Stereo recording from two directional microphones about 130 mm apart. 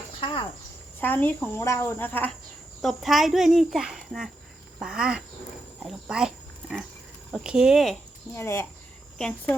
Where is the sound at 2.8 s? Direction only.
Centre (ahead or behind).